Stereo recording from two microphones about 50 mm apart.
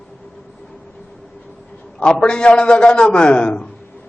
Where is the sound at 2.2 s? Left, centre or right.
Left.